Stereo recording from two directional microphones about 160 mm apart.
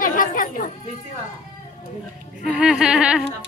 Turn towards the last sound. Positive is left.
turn(degrees=-5)  # may be behind; listen again after turning